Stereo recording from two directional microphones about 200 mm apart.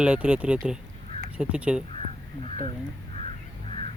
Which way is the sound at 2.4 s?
30° left (ahead or behind).